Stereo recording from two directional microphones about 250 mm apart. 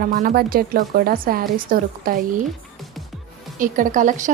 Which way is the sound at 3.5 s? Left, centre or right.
Right.